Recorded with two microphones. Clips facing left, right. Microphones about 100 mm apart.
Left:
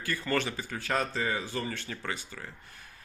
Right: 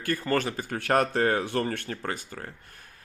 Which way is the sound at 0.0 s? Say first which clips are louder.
Right 4 dB; 45° right (ahead or behind).